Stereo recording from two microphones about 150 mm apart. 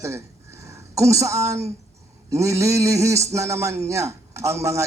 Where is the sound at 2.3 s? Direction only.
20° right (ahead or behind).